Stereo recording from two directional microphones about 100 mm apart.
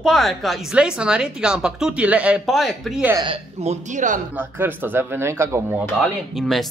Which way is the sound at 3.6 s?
90° right.